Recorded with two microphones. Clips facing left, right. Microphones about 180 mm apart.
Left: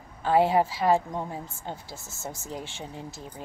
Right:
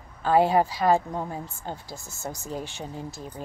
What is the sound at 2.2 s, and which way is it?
Speech, 25° left (ahead or behind).